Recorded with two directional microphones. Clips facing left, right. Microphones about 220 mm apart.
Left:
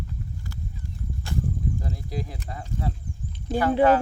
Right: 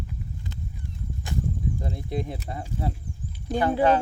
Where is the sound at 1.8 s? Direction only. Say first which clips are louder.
Right 2 dB; 25° right (ahead or behind).